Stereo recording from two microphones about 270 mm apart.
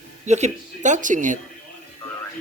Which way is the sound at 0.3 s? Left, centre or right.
Right.